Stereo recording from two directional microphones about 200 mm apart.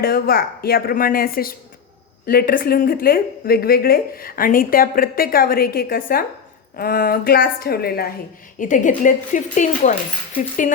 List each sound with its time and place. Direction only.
0.0 s speech: 50° left (ahead or behind)
8.5 s speech: 40° left (ahead or behind)